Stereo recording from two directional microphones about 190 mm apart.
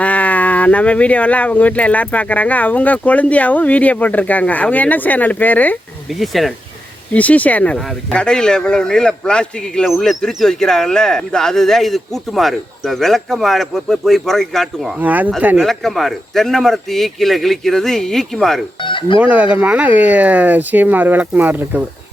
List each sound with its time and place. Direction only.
0.0 s speech: 5° left (ahead or behind)
18.8 s chicken: 25° left (ahead or behind)
19.2 s speech: 5° right (ahead or behind)